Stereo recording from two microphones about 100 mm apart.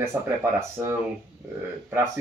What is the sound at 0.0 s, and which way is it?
Speech, 25° right (ahead or behind).